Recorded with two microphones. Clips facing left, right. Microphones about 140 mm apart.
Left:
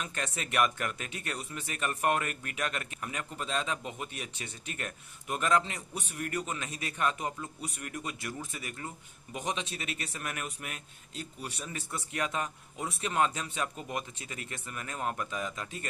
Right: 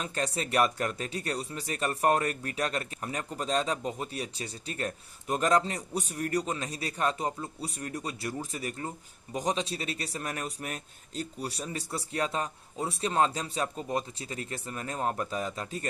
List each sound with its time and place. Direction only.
0.0 s speech: 35° right (ahead or behind)